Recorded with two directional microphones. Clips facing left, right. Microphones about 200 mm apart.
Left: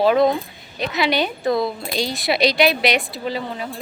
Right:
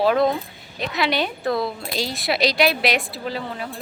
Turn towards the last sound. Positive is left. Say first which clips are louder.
# left 2 dB
turn(degrees=0)  # may be behind; listen again after turning